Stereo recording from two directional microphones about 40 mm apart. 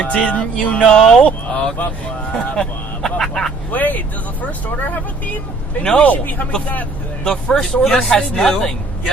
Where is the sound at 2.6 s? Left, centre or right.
Centre.